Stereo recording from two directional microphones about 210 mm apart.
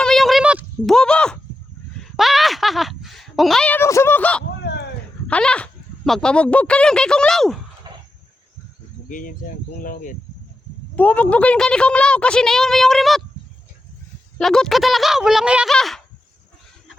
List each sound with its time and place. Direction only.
0.0 s a sound: centre (ahead or behind)
2.1 s a woman's voice: centre (ahead or behind)
7.9 s a sound: 20° right (ahead or behind)
9.0 s speech: 40° left (ahead or behind)
10.9 s a woman's voice: 5° left (ahead or behind)
14.3 s a woman's voice: 5° left (ahead or behind)